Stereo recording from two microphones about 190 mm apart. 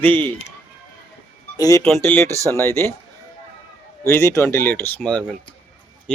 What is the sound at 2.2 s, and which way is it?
Speech, 15° right (ahead or behind).